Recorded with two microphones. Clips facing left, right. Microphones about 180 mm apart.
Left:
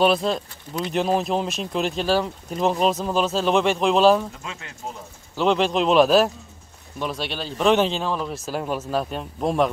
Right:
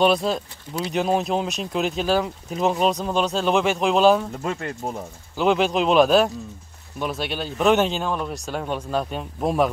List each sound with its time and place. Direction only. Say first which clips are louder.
0.0 s speech: even; centre (ahead or behind)
4.3 s speech: right 10 dB; 50° right (ahead or behind)
5.3 s speech: even; centre (ahead or behind)